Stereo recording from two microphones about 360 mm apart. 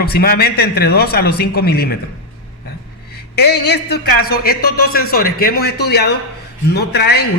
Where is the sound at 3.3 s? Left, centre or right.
Left.